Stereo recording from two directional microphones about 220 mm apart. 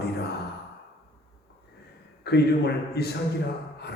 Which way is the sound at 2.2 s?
50° left (ahead or behind).